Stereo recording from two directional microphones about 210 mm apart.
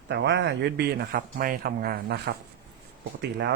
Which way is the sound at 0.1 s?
55° right (ahead or behind).